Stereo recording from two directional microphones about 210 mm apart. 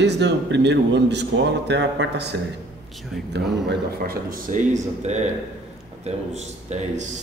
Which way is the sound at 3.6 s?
45° right (ahead or behind).